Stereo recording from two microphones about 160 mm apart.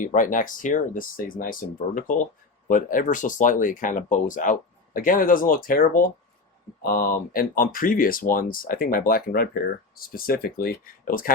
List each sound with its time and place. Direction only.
0.0 s speech: 55° left (ahead or behind)